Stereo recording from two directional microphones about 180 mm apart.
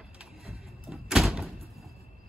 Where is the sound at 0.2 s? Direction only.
Centre (ahead or behind).